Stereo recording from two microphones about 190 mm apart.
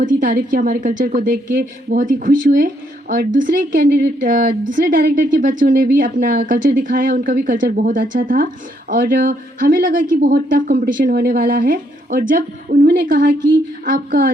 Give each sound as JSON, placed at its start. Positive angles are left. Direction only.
{"t": 0.0, "sound": "a woman's voice", "side_deg": -45}